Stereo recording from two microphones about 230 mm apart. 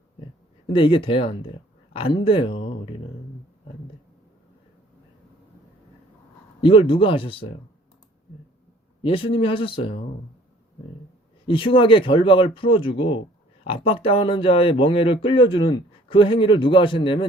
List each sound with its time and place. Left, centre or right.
0.7 s speech: left
6.6 s speech: left
9.0 s speech: left
11.4 s speech: left